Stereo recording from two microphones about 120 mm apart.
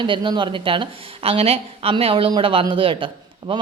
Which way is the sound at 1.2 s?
60° right (ahead or behind).